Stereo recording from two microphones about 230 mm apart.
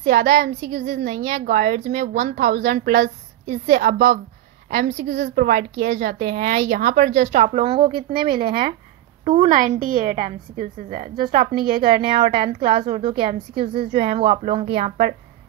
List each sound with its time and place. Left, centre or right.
0.1 s a woman's voice: right
8.3 s a woman's voice: right